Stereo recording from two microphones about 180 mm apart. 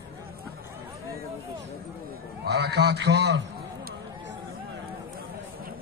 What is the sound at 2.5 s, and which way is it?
Speech, 70° right (ahead or behind).